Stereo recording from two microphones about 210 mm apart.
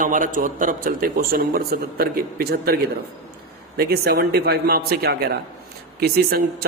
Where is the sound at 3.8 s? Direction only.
45° right (ahead or behind).